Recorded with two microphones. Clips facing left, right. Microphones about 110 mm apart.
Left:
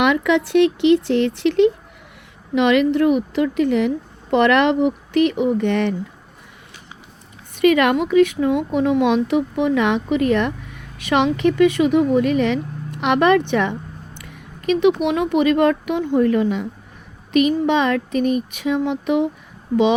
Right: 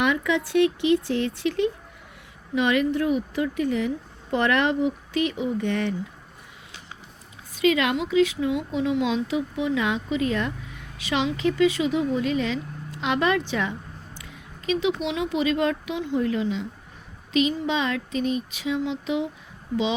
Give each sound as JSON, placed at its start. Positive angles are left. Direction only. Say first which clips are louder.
{"t": 0.0, "sound": "a woman's voice", "louder": "left 6 dB", "side_deg": 80}
{"t": 7.6, "sound": "speech", "louder": "left 7 dB", "side_deg": 60}
{"t": 14.2, "sound": "a sound", "louder": "left 4 dB", "side_deg": 55}
{"t": 15.0, "sound": "speech", "louder": "left 7 dB", "side_deg": 55}